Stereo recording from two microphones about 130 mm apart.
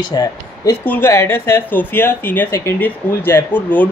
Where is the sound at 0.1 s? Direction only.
25° left (ahead or behind).